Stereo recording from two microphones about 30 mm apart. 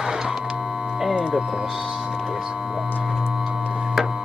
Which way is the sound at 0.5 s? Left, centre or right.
Centre.